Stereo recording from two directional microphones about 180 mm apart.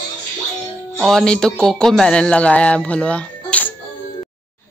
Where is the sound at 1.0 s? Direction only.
5° left (ahead or behind).